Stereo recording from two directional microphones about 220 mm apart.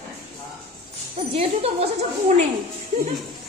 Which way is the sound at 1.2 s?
25° right (ahead or behind).